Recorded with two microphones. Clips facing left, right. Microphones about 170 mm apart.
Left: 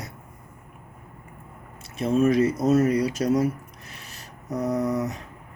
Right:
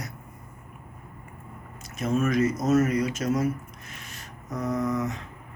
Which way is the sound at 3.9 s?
35° left (ahead or behind).